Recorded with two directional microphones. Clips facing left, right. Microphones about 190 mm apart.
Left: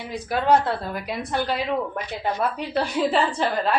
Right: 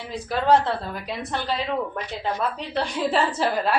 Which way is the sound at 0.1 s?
5° left (ahead or behind).